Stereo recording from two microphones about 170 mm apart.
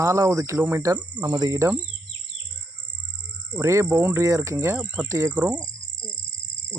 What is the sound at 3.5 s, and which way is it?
Speech, 15° right (ahead or behind).